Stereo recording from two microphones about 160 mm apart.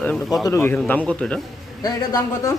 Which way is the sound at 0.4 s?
15° left (ahead or behind).